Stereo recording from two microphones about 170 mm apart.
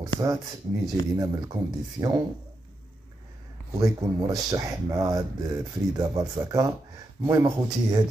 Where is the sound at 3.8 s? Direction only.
20° right (ahead or behind).